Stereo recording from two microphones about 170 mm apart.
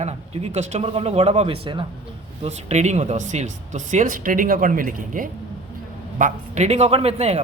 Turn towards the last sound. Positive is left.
turn(degrees=-40)  # may be behind; listen again after turning